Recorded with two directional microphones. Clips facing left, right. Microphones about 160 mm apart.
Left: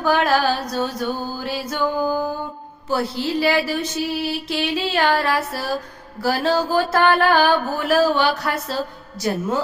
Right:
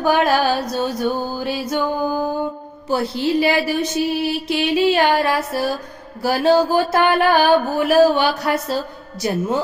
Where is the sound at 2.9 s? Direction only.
20° right (ahead or behind).